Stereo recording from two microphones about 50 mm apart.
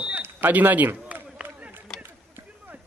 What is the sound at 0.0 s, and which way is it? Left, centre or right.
Smoke detector, right.